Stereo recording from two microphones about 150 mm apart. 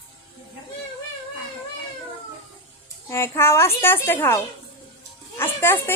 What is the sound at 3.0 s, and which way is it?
A woman's voice, 15° left (ahead or behind).